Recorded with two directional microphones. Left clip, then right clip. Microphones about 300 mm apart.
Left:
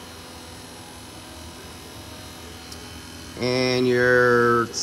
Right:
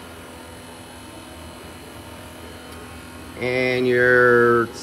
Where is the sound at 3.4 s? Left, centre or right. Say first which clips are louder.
Right 1 dB; centre.